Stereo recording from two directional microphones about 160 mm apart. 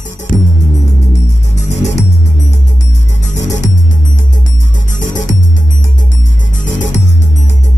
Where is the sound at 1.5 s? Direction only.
45° left (ahead or behind).